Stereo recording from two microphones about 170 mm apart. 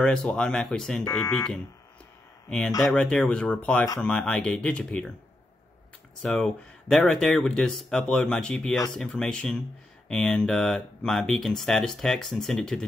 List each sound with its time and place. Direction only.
0.0 s speech: 5° left (ahead or behind)
1.0 s speech: 20° left (ahead or behind)
2.5 s speech: 5° left (ahead or behind)
6.2 s speech: 5° left (ahead or behind)